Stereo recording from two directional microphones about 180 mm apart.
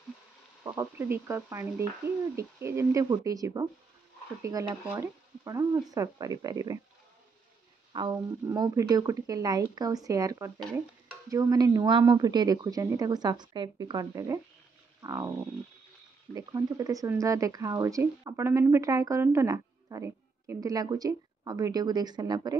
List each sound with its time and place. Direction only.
0.7 s a woman's voice: 15° right (ahead or behind)
7.9 s a woman's voice: 25° right (ahead or behind)
15.0 s a sound: 15° right (ahead or behind)
16.3 s a woman's voice: 20° right (ahead or behind)